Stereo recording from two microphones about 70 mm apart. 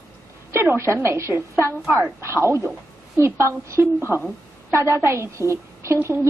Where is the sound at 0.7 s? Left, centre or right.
Right.